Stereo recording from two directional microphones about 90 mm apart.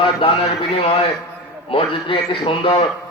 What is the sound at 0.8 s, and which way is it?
A man's voice, 90° left.